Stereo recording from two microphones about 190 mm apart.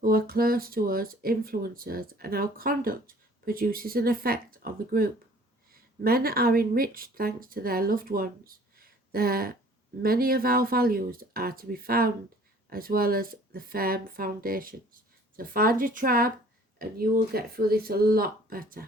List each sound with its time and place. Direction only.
0.0 s speech: 50° right (ahead or behind)